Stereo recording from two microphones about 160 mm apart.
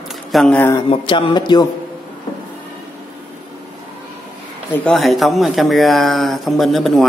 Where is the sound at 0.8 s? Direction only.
30° left (ahead or behind).